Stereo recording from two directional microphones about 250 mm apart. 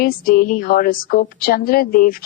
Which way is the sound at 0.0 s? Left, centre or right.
Left.